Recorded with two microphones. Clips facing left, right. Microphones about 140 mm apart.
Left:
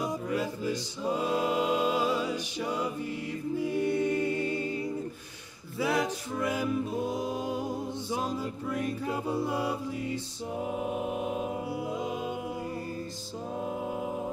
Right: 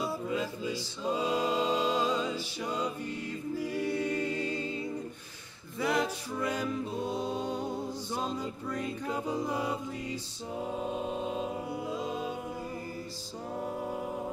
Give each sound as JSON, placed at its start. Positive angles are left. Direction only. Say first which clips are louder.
{"t": 1.0, "sound": "music", "louder": "left 1 dB", "side_deg": 10}
{"t": 3.5, "sound": "choir", "louder": "left 4 dB", "side_deg": 20}
{"t": 4.1, "sound": "music", "louder": "left 3 dB", "side_deg": 15}
{"t": 4.6, "sound": "a capella", "louder": "left 3 dB", "side_deg": -20}
{"t": 5.8, "sound": "music", "louder": "left 1 dB", "side_deg": 5}
{"t": 10.6, "sound": "music", "louder": "left 2 dB", "side_deg": 15}